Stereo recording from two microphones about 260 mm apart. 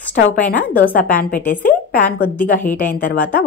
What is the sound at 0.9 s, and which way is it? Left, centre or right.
A woman's voice, left.